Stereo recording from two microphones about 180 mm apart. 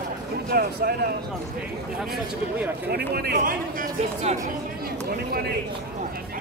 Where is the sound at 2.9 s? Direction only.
60° right (ahead or behind); by 4.4 s 45° right (ahead or behind).